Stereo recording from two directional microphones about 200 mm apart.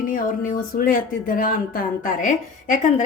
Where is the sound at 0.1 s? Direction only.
45° left (ahead or behind).